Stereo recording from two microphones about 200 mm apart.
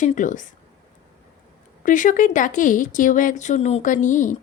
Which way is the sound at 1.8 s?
40° left (ahead or behind).